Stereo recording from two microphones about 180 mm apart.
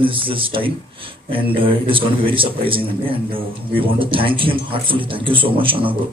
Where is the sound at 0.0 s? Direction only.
30° right (ahead or behind).